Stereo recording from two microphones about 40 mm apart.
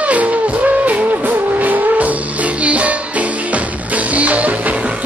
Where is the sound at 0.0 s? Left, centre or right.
Right.